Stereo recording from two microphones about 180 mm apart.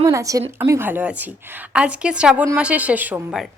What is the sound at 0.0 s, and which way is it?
A woman's voice, 20° right (ahead or behind).